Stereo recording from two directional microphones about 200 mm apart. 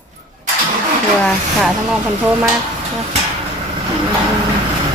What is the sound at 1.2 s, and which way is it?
Speech, centre (ahead or behind).